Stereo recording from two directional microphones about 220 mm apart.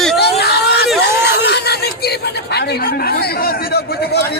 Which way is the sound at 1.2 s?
50° left (ahead or behind).